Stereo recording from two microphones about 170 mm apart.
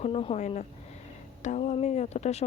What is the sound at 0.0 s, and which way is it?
Speech, 35° left (ahead or behind).